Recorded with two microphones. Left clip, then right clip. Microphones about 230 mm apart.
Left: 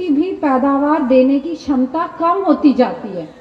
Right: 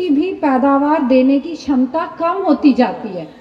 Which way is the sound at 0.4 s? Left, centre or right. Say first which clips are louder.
Right 2 dB; right.